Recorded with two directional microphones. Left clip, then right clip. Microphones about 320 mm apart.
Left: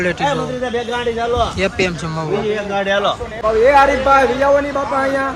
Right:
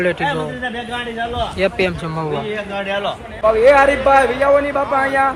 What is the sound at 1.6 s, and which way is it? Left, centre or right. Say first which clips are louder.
Speech: even; centre.